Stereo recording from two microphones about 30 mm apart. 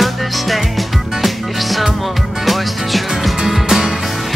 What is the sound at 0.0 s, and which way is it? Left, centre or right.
Music, centre.